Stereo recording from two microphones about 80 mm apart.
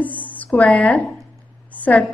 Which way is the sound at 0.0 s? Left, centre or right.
Centre.